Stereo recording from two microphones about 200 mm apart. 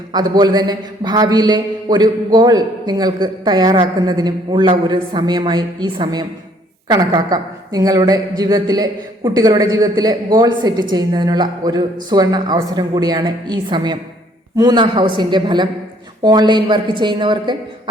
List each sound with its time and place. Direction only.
0.1 s a man's voice: 20° right (ahead or behind)